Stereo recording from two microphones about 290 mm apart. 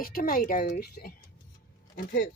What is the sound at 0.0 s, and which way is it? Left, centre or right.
Speech, left.